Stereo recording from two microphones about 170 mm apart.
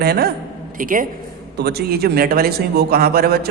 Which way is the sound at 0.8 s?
50° right (ahead or behind).